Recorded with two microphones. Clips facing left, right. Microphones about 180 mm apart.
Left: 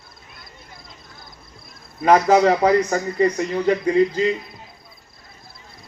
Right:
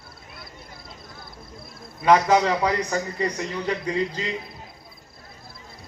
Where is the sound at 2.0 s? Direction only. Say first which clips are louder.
Left 3 dB; 35° left (ahead or behind).